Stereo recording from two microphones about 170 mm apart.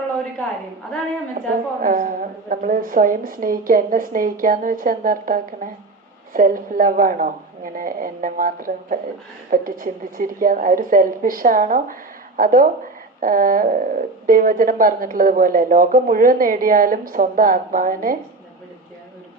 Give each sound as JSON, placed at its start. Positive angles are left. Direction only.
{"t": 1.8, "sound": "speech", "side_deg": -50}